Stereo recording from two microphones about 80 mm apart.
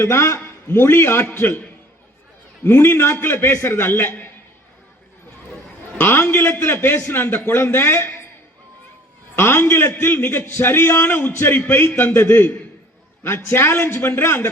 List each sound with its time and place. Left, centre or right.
0.0 s a man's voice: left
2.6 s a man's voice: left
6.0 s a man's voice: left
9.3 s a man's voice: left